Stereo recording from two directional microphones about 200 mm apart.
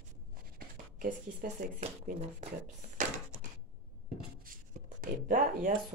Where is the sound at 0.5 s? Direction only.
45° right (ahead or behind).